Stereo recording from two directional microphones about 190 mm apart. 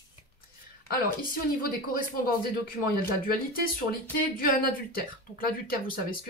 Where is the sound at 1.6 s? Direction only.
50° left (ahead or behind).